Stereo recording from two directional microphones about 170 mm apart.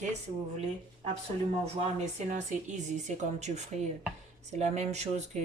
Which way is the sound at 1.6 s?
45° right (ahead or behind).